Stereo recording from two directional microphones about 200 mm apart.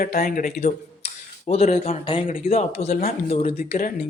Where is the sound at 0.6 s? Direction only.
30° left (ahead or behind).